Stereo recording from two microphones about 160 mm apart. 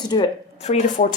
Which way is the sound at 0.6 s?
45° left (ahead or behind).